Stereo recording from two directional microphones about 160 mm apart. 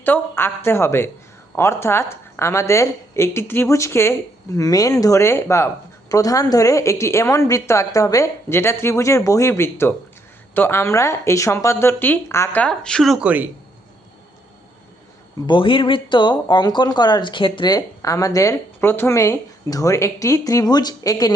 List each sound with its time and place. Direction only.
0.0 s a woman's voice: 10° left (ahead or behind); by 13.5 s 10° right (ahead or behind)
15.4 s speech: 30° left (ahead or behind)